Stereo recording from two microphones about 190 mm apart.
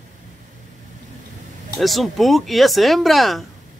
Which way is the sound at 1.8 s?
Centre (ahead or behind).